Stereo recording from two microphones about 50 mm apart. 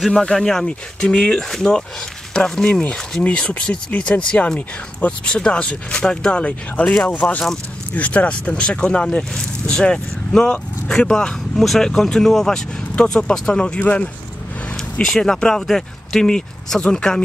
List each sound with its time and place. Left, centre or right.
0.1 s speech: centre
2.9 s speech: left
15.0 s speech: centre